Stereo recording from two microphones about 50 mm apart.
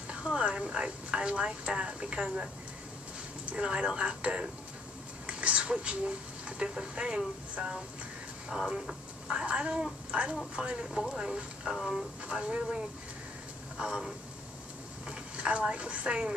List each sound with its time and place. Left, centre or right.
0.1 s a woman's voice: right
3.5 s a woman's voice: centre
5.2 s a sound: right
6.6 s a woman's voice: centre
9.5 s a woman's voice: centre
12.3 s a woman's voice: right